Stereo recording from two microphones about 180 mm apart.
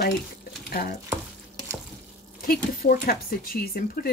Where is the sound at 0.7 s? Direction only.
55° left (ahead or behind).